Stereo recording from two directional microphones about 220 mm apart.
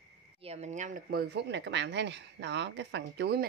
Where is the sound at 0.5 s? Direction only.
30° right (ahead or behind).